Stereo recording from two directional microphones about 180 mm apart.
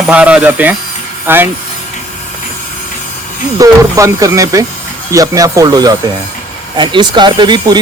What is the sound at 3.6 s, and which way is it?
Speech, 15° right (ahead or behind).